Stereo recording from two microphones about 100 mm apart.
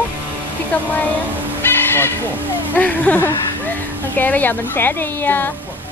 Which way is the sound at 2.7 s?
15° left (ahead or behind).